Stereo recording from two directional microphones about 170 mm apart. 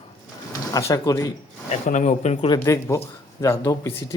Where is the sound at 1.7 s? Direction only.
45° left (ahead or behind).